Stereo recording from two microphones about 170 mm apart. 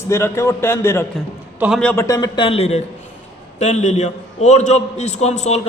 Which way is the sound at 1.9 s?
20° left (ahead or behind).